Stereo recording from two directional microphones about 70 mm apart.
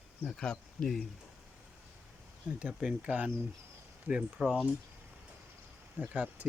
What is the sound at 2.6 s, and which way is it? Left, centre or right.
Speech, centre.